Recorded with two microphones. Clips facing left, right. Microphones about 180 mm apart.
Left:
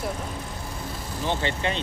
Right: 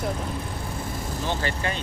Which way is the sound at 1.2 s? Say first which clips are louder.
Left 2 dB; 25° left (ahead or behind).